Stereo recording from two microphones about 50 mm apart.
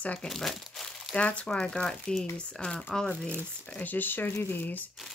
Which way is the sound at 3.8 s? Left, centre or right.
Left.